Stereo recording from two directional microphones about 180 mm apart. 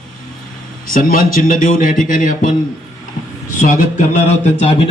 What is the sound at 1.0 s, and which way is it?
Speech, 50° left (ahead or behind).